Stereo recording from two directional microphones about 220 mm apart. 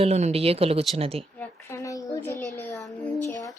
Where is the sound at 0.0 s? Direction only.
30° right (ahead or behind).